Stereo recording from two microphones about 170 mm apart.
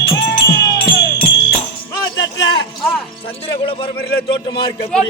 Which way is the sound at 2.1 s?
90° left.